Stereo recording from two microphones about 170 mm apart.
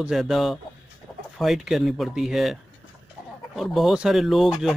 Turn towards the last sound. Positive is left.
turn(degrees=0)  # may be behind; listen again after turning